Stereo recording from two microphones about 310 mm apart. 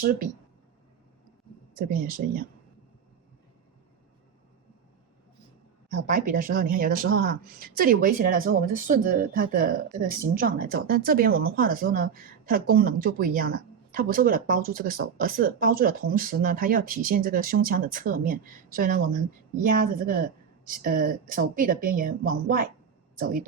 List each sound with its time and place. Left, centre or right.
0.0 s speech: right
1.7 s speech: right
6.0 s speech: right